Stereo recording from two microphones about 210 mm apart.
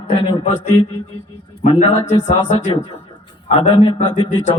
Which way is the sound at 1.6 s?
30° left (ahead or behind).